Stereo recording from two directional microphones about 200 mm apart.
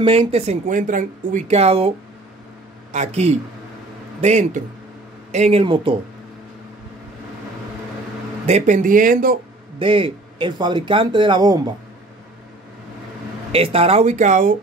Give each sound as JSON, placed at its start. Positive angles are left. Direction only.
{"t": 0.0, "sound": "a man's voice", "side_deg": -30}
{"t": 8.5, "sound": "speech", "side_deg": -35}
{"t": 9.8, "sound": "a man's voice", "side_deg": -25}
{"t": 13.5, "sound": "speech", "side_deg": -30}